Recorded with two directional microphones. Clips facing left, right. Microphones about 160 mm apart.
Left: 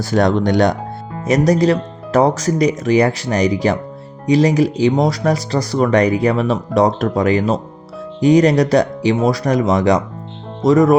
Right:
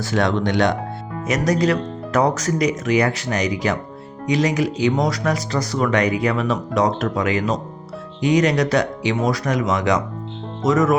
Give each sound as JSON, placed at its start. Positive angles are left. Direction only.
{"t": 0.0, "sound": "speech", "side_deg": 40}